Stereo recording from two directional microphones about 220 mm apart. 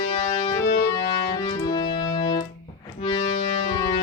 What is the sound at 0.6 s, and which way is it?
Music, 40° left (ahead or behind).